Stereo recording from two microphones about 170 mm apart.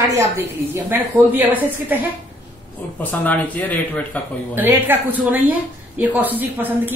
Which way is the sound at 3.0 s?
10° left (ahead or behind).